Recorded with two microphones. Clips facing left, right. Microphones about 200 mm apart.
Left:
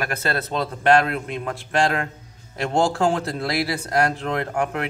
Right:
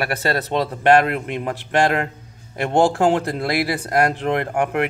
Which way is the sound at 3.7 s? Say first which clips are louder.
Right 2 dB; 15° right (ahead or behind).